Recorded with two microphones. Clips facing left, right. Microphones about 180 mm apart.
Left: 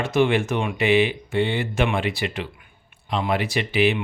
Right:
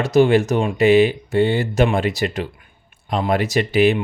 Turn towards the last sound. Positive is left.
turn(degrees=-45)  # may be behind; listen again after turning